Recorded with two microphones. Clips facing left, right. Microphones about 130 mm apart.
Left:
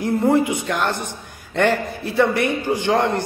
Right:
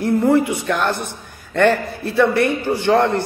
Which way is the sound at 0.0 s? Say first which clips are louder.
Right 2 dB; 20° left (ahead or behind).